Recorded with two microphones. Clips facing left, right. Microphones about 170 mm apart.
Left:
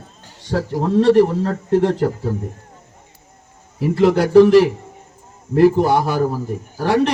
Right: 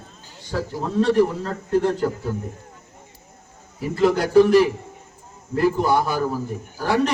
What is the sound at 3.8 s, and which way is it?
A man's voice, 80° left.